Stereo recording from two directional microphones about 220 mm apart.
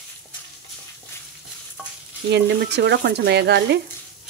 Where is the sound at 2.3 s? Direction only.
50° right (ahead or behind).